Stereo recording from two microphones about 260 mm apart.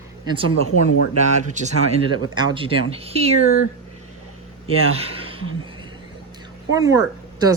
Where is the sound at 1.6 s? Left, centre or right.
Right.